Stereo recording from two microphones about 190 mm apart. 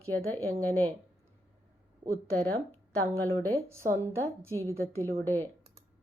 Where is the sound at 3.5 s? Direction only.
15° right (ahead or behind).